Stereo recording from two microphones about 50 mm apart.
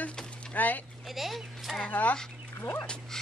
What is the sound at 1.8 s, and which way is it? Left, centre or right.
Chicken, left.